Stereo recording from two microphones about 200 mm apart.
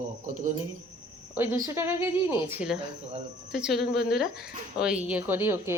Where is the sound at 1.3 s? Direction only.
10° right (ahead or behind).